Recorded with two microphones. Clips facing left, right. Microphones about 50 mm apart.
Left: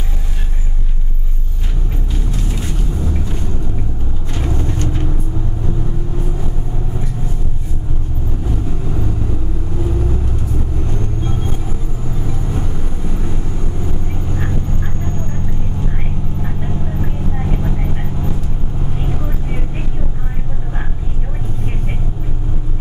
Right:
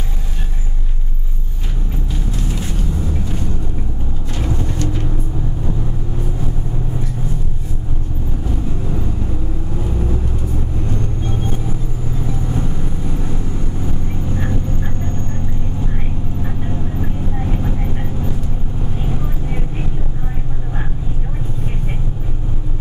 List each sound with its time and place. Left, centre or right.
2.4 s vehicle: centre
4.7 s vehicle: left
16.4 s vehicle: centre